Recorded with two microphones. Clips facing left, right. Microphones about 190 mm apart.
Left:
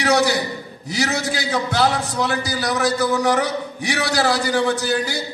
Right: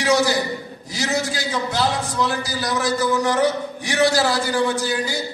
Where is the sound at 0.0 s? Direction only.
65° left (ahead or behind).